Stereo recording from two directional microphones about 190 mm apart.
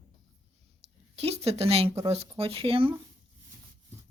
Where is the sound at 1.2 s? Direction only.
35° right (ahead or behind).